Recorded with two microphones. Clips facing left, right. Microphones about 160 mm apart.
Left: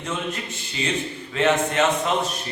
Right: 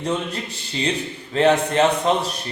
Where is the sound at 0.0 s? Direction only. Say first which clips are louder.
Right 4 dB; 35° right (ahead or behind).